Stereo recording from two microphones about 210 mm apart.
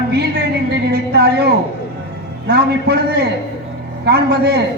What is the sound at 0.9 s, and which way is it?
A woman's voice, 50° right (ahead or behind).